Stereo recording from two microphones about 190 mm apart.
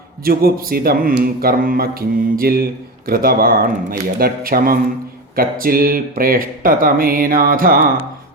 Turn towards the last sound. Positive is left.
turn(degrees=-50)  # may be behind; listen again after turning